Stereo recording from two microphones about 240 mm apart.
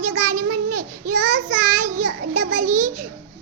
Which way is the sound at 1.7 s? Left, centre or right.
Right.